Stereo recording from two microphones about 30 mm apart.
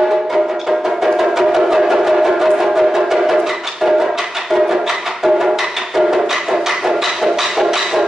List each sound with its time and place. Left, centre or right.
0.3 s music: centre
5.9 s music: centre